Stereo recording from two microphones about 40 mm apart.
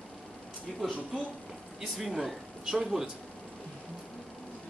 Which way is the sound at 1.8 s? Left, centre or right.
Centre.